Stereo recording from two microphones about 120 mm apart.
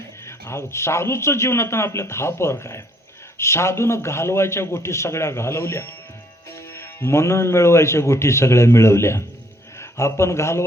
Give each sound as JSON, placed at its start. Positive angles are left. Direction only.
{"t": 0.3, "sound": "a man's voice", "side_deg": 25}